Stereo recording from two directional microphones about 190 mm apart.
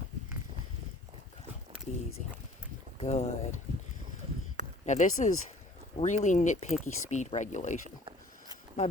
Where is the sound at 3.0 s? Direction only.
35° left (ahead or behind).